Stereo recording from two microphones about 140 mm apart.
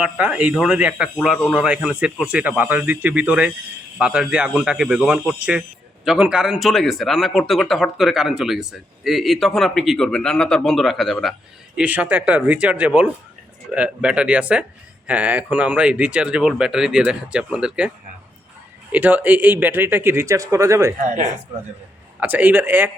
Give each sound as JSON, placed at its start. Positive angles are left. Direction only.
{"t": 0.0, "sound": "speech", "side_deg": -10}
{"t": 11.8, "sound": "speech", "side_deg": -10}
{"t": 21.0, "sound": "speech", "side_deg": -55}
{"t": 22.2, "sound": "speech", "side_deg": -10}